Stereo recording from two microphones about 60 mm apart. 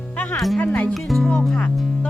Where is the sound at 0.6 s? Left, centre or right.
Left.